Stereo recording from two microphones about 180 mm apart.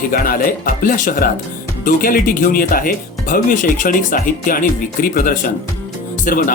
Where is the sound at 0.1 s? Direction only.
55° left (ahead or behind).